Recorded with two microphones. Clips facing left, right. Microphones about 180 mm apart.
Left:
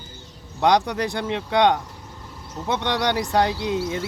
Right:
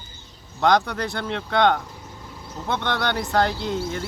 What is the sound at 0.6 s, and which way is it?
Speech, 20° left (ahead or behind).